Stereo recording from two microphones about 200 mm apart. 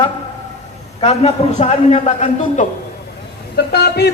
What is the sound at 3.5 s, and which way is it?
Speech, 55° left (ahead or behind).